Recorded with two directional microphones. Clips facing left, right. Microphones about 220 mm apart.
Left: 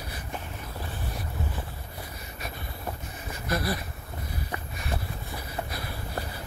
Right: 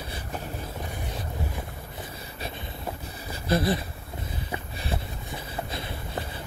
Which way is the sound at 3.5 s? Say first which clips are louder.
Right 5 dB; 25° right (ahead or behind).